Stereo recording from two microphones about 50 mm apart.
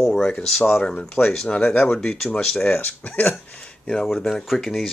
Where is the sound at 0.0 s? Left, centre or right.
Centre.